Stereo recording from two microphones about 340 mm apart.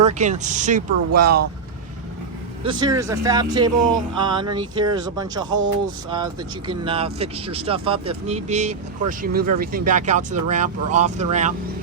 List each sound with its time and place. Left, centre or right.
0.0 s speech: right
2.6 s speech: centre